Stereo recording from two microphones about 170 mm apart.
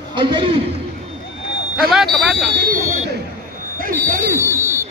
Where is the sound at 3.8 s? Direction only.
50° right (ahead or behind).